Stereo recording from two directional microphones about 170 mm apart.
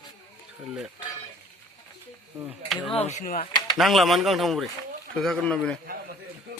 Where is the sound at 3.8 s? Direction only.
Centre (ahead or behind).